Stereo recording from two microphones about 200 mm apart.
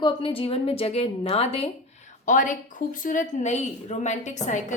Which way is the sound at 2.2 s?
40° left (ahead or behind).